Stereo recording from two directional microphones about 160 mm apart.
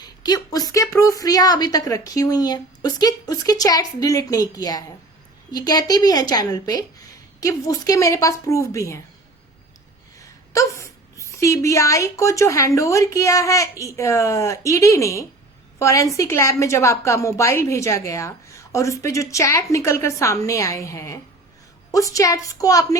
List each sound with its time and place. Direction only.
0.0 s a woman's voice: 25° left (ahead or behind)
10.2 s a woman's voice: 20° left (ahead or behind)